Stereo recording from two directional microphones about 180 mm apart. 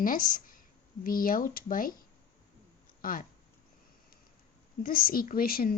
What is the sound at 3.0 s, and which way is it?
Speech, 50° left (ahead or behind).